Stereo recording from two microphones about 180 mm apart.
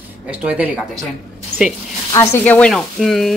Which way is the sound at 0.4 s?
5° right (ahead or behind).